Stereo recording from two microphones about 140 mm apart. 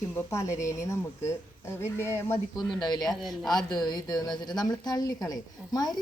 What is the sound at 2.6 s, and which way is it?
Speech, 30° left (ahead or behind).